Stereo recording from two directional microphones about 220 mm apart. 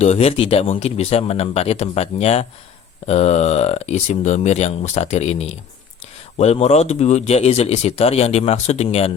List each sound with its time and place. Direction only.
0.0 s speech: 30° left (ahead or behind)